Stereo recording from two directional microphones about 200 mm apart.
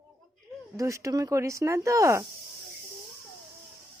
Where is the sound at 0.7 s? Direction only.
15° right (ahead or behind).